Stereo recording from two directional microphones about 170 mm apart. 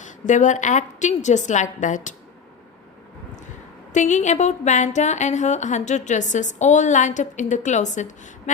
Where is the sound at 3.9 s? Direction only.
45° left (ahead or behind).